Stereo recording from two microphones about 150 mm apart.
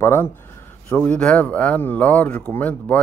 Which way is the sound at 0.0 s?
15° left (ahead or behind).